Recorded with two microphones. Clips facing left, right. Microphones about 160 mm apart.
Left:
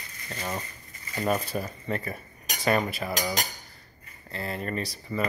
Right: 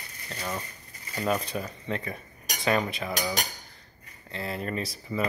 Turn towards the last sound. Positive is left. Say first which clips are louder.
# even
turn(degrees=0)  # may be behind; listen again after turning